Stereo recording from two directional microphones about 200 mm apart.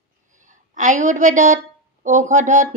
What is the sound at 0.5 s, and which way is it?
A woman's voice, 40° right (ahead or behind).